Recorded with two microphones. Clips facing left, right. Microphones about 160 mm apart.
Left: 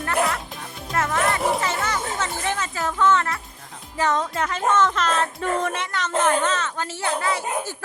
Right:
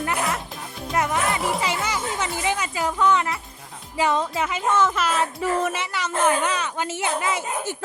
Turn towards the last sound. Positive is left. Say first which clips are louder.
# even
turn(degrees=-20)  # may be behind; listen again after turning